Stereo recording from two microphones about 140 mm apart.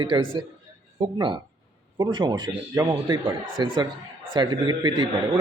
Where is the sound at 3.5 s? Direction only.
35° right (ahead or behind).